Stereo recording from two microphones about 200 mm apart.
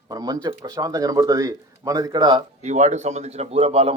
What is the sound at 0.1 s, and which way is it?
Speech, 20° right (ahead or behind).